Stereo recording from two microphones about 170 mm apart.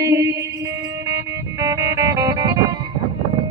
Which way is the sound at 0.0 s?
20° right (ahead or behind).